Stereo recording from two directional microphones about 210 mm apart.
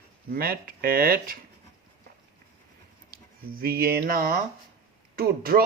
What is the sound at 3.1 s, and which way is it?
Speech, 45° right (ahead or behind).